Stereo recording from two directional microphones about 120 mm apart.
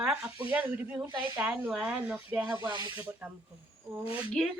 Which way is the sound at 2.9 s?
15° right (ahead or behind).